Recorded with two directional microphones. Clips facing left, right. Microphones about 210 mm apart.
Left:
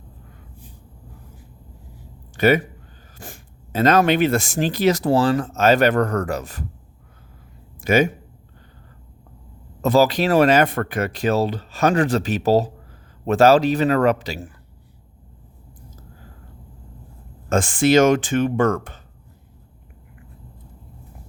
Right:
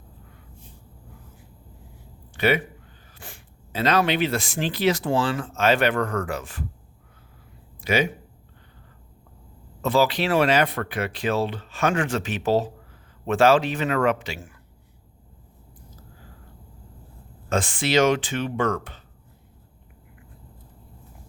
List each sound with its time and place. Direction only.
2.3 s speech: 45° left (ahead or behind)
7.8 s speech: 45° left (ahead or behind)
9.8 s speech: 40° left (ahead or behind)
17.5 s speech: 45° left (ahead or behind)